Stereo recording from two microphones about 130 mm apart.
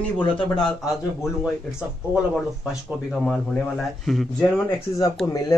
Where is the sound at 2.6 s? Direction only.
Centre (ahead or behind).